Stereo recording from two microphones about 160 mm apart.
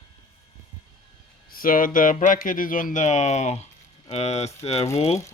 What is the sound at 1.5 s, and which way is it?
Speech, 60° left (ahead or behind).